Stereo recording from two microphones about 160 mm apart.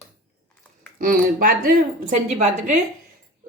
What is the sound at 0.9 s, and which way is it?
A woman's voice, 60° right (ahead or behind).